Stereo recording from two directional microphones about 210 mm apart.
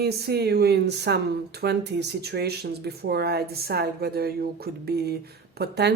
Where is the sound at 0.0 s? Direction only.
50° right (ahead or behind).